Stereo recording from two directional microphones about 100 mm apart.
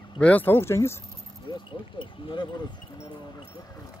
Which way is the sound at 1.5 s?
55° left (ahead or behind).